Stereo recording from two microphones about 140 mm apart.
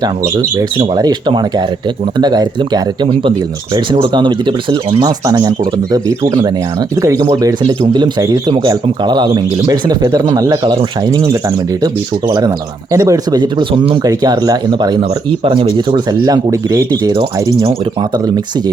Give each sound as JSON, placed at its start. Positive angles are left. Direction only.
{"t": 0.9, "sound": "speech", "side_deg": -30}
{"t": 12.9, "sound": "speech", "side_deg": -25}